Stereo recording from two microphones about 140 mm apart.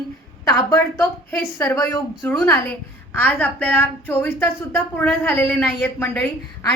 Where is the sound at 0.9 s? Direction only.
15° left (ahead or behind).